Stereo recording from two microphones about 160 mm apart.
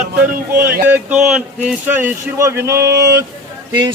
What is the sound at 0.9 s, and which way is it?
A man's voice, 5° right (ahead or behind).